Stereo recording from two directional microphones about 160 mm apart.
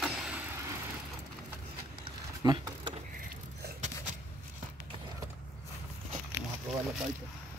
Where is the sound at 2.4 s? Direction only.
25° right (ahead or behind).